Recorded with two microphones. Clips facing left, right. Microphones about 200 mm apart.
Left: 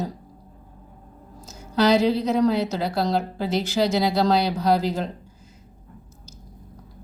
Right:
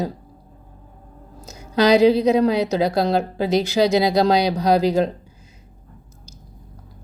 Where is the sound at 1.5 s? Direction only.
15° right (ahead or behind).